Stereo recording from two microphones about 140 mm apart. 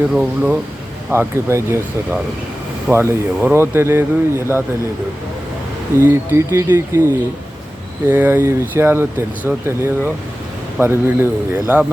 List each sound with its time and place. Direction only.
0.1 s speech: 5° right (ahead or behind)
1.1 s speech: 15° right (ahead or behind)
6.0 s speech: 20° right (ahead or behind)